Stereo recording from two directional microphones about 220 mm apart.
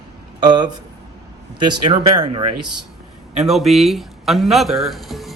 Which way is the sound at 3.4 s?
Centre (ahead or behind).